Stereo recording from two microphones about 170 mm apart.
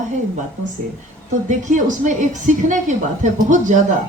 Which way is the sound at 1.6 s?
50° right (ahead or behind).